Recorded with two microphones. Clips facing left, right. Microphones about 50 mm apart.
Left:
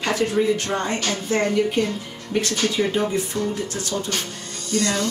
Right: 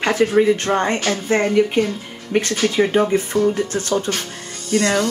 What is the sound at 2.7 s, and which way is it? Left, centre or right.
Speech, right.